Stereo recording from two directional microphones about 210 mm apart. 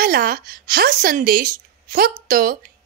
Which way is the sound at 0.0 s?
45° right (ahead or behind).